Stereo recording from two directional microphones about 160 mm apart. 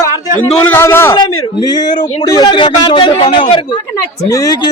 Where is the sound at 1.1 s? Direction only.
25° left (ahead or behind).